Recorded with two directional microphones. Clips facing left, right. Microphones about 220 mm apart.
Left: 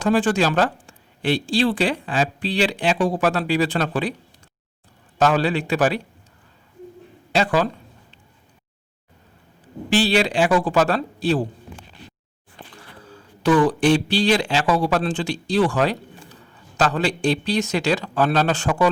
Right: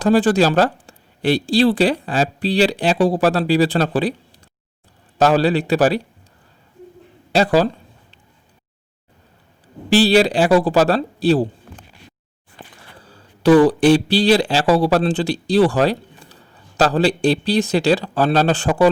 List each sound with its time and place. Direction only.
0.0 s speech: 35° right (ahead or behind)
5.1 s speech: 35° right (ahead or behind)
7.3 s speech: 35° right (ahead or behind)
9.9 s speech: 35° right (ahead or behind)
13.0 s speech: 35° right (ahead or behind)